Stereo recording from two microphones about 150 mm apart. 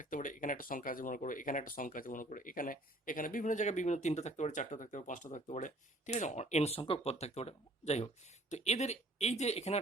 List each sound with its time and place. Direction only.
0.0 s speech: 60° left (ahead or behind); by 9.8 s 45° left (ahead or behind)